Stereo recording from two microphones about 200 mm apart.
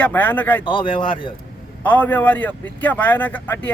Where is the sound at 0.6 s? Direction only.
25° left (ahead or behind).